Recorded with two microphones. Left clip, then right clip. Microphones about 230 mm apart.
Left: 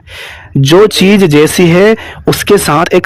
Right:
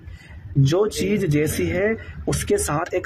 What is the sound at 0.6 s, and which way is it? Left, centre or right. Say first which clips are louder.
Speech: left 15 dB; left.